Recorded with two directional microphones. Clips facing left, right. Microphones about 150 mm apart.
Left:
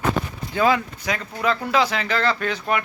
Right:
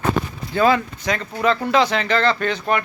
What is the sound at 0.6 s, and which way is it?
Speech, 10° left (ahead or behind).